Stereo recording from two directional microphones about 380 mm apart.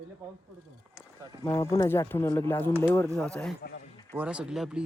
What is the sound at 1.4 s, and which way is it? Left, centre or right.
Speech, centre.